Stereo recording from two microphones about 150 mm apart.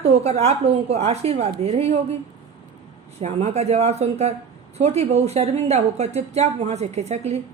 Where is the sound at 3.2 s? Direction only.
45° right (ahead or behind).